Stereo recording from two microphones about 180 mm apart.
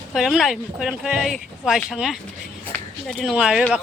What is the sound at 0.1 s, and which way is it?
Speech, centre (ahead or behind).